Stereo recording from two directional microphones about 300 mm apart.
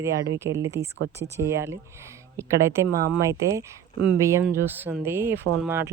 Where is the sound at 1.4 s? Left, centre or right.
Centre.